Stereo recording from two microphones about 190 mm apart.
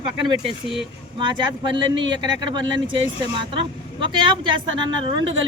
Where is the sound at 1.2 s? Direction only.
25° right (ahead or behind).